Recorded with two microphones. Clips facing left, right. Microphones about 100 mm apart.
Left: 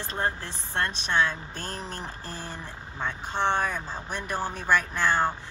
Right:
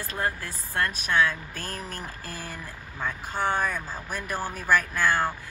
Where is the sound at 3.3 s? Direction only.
5° right (ahead or behind).